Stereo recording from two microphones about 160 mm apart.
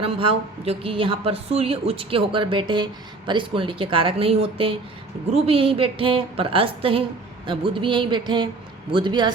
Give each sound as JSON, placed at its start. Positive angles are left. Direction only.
{"t": 0.0, "sound": "a woman's voice", "side_deg": -35}